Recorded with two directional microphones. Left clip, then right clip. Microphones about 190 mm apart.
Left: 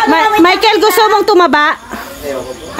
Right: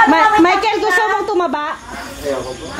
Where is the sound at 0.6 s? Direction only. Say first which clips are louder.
Left 6 dB; 40° left (ahead or behind).